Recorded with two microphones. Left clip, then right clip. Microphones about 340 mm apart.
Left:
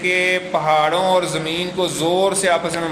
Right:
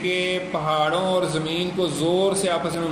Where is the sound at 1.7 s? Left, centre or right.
Left.